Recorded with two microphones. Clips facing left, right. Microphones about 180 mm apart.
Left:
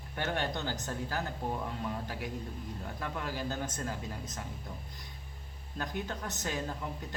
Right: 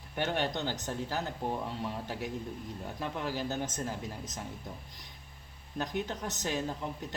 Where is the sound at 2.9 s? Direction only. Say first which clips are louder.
Right 3 dB; 20° right (ahead or behind).